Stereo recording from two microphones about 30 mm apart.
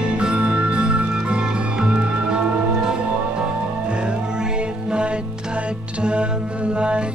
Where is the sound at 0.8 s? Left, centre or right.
Right.